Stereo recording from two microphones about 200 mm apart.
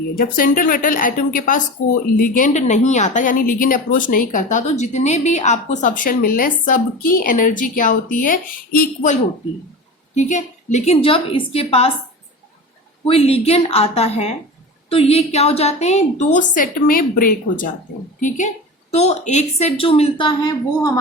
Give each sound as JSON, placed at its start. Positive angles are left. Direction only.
{"t": 0.2, "sound": "a woman's voice", "side_deg": 45}
{"t": 10.2, "sound": "a woman's voice", "side_deg": 35}
{"t": 13.1, "sound": "a woman's voice", "side_deg": 30}
{"t": 18.9, "sound": "a woman's voice", "side_deg": 30}